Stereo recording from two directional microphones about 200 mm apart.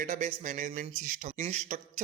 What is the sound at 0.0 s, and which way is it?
Speech, 35° right (ahead or behind).